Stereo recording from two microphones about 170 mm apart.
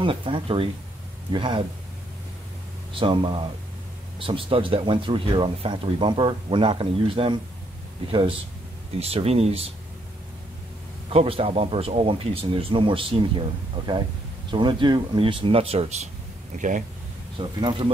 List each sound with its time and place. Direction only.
0.0 s speech: 30° right (ahead or behind)
2.9 s speech: 30° right (ahead or behind)
11.1 s speech: 35° right (ahead or behind)
14.5 s speech: 25° right (ahead or behind)
16.5 s speech: 50° right (ahead or behind)
17.4 s speech: 30° right (ahead or behind)